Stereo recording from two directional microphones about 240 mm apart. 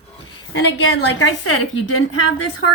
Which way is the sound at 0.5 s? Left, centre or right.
Left.